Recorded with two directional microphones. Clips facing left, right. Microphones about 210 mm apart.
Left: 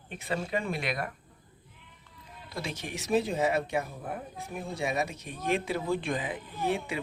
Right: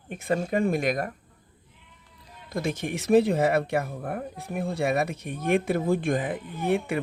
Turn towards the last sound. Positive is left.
turn(degrees=-55)  # may be behind; listen again after turning